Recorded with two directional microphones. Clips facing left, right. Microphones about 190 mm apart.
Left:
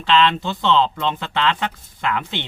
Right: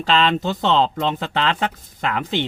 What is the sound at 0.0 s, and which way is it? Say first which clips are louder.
Speech: left 1 dB; 40° right (ahead or behind).